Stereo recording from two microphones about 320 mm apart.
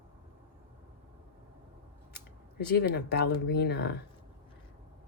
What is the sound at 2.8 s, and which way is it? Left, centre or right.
Speech, left.